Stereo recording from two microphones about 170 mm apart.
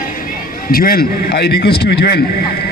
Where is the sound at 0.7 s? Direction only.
60° left (ahead or behind).